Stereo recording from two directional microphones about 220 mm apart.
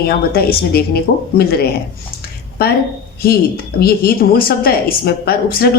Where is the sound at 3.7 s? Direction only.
45° left (ahead or behind).